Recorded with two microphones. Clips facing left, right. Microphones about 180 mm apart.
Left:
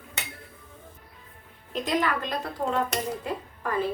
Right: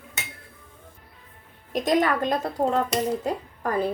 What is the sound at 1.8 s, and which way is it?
Speech, 45° right (ahead or behind).